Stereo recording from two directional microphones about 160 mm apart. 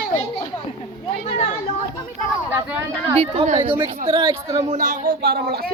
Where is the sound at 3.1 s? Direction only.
40° right (ahead or behind).